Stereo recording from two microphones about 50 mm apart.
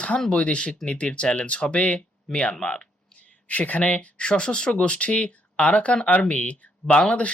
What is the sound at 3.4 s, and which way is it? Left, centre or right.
Speech, left.